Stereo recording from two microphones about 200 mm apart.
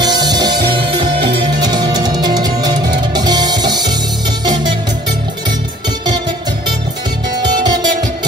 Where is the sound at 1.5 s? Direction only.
20° right (ahead or behind).